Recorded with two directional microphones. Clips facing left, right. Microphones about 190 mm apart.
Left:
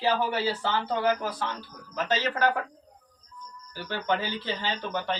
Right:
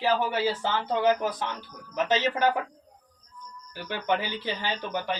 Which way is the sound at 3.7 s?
15° right (ahead or behind).